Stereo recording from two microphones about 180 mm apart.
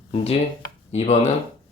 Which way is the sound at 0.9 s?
40° left (ahead or behind).